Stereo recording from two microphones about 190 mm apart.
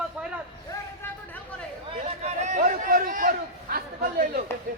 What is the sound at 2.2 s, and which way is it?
Chatter, 40° right (ahead or behind).